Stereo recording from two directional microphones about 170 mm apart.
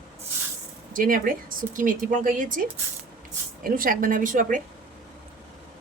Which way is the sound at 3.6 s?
55° right (ahead or behind).